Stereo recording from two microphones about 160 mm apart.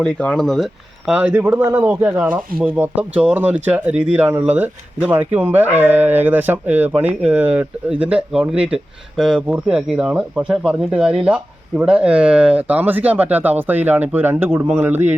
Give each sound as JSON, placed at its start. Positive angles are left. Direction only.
{"t": 0.0, "sound": "speech", "side_deg": 5}